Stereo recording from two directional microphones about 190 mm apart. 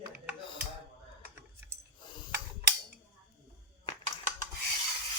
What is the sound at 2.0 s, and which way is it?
Tick, 25° left (ahead or behind).